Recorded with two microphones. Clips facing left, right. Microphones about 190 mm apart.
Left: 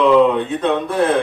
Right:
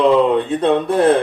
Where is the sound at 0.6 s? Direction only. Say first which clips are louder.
Right 3 dB; 30° right (ahead or behind).